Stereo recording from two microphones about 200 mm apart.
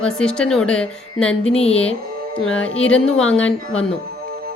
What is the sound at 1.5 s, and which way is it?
Speech, 30° left (ahead or behind).